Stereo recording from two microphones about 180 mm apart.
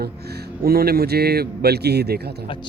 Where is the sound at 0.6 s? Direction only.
60° right (ahead or behind).